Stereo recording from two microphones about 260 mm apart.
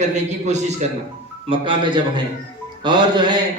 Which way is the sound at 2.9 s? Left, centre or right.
Centre.